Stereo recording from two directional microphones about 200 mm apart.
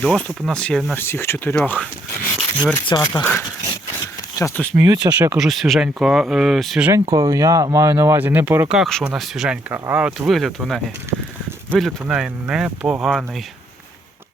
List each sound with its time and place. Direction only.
0.0 s speech: 5° left (ahead or behind)
2.8 s speech: 20° left (ahead or behind)
4.4 s speech: 10° left (ahead or behind)
4.8 s speech: 20° right (ahead or behind)
5.3 s speech: centre (ahead or behind)
7.0 s speech: 20° right (ahead or behind)
8.8 s speech: centre (ahead or behind)